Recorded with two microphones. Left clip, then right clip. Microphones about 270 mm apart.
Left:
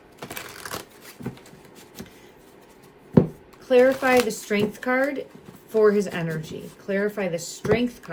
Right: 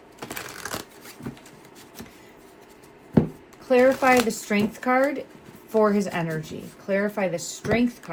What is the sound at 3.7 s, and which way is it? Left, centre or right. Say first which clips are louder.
Speech: even; centre.